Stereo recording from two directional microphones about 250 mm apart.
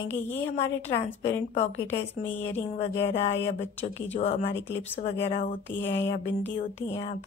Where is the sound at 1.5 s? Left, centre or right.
Left.